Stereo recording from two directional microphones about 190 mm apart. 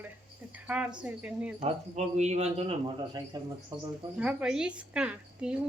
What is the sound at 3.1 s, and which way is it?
Speech, 20° right (ahead or behind).